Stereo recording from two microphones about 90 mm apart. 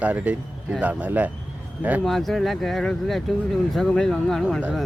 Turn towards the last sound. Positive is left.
turn(degrees=10)  # may be behind; listen again after turning